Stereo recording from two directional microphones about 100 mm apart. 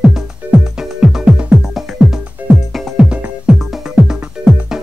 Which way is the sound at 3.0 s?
10° right (ahead or behind).